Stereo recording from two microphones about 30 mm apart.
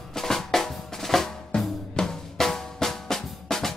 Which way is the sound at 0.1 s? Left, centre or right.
Centre.